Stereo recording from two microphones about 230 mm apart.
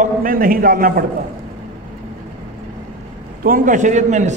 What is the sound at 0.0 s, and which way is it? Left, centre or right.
A man's voice, right.